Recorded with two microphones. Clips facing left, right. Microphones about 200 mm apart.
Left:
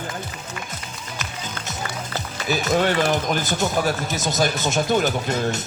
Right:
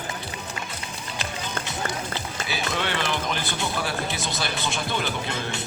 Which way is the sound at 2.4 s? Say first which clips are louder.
Left 9 dB; 45° left (ahead or behind).